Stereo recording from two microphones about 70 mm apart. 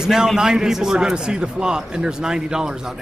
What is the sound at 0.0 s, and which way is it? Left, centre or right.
A man's voice, centre.